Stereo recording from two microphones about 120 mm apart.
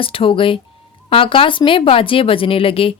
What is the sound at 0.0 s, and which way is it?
Speech, 45° left (ahead or behind).